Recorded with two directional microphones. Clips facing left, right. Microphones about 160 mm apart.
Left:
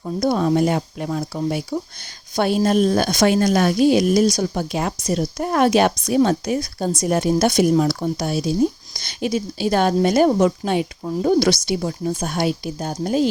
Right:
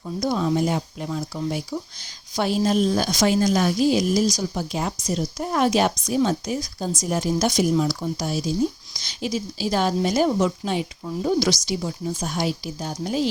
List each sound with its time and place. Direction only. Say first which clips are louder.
0.2 s a woman's voice: left 4 dB; 55° left (ahead or behind)